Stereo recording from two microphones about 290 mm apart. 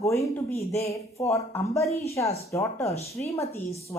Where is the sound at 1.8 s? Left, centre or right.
Left.